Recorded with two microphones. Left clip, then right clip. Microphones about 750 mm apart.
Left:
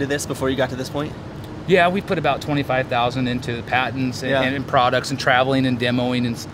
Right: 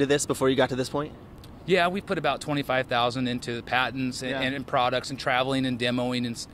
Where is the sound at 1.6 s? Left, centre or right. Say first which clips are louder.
Left 7 dB; right.